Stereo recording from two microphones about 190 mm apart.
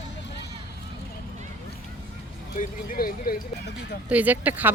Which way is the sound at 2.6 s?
50° left (ahead or behind).